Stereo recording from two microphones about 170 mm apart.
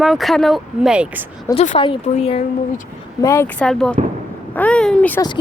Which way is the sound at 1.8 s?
30° left (ahead or behind).